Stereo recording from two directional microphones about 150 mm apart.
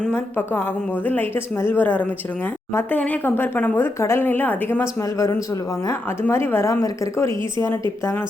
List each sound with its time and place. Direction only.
0.0 s a woman's voice: 15° left (ahead or behind)